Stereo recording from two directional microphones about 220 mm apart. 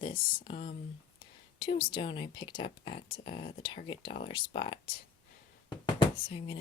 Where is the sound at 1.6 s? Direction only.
20° left (ahead or behind).